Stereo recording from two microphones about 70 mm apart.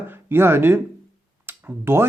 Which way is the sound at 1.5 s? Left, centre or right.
Right.